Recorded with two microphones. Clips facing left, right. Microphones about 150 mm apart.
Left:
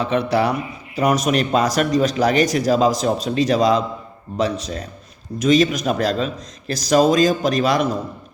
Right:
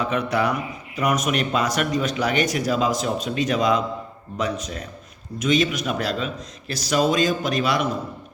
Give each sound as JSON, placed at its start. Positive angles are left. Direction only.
{"t": 0.0, "sound": "a man's voice", "side_deg": 30}